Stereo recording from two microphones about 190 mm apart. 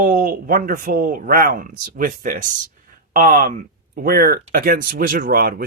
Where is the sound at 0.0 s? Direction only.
45° right (ahead or behind).